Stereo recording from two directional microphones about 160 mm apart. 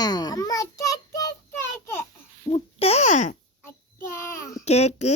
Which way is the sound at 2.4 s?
40° left (ahead or behind).